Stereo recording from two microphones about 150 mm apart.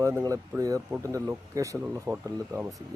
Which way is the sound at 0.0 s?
20° right (ahead or behind).